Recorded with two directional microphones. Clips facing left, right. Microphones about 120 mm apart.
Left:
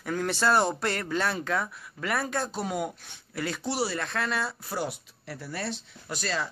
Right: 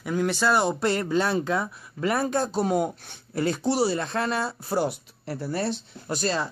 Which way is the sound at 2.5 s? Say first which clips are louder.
Right 7 dB; 35° right (ahead or behind).